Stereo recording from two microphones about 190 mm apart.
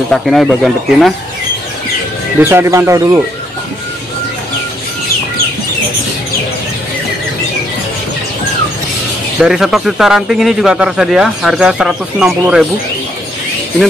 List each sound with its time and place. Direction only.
0.1 s a man's voice: centre (ahead or behind)
2.5 s speech: 15° right (ahead or behind)
9.4 s a man's voice: centre (ahead or behind)